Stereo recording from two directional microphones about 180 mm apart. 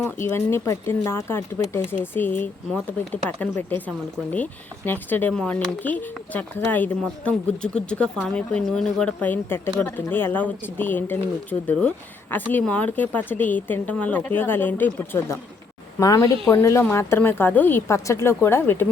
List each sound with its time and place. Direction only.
0.0 s a woman's voice: 15° left (ahead or behind)